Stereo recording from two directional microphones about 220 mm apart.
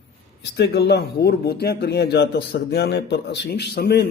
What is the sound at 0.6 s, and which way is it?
Speech, 50° left (ahead or behind).